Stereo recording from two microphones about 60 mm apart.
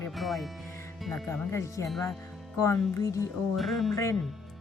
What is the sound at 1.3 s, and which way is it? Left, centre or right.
Speech, left.